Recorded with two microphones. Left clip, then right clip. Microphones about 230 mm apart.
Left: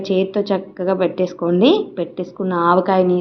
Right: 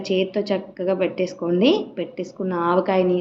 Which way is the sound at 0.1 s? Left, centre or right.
Centre.